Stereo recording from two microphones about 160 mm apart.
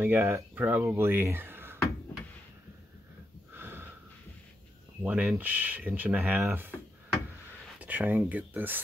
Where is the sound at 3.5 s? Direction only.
15° right (ahead or behind).